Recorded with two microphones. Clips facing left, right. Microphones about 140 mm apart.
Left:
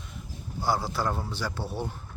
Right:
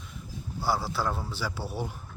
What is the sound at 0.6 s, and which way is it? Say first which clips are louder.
Speech: left 1 dB; centre (ahead or behind).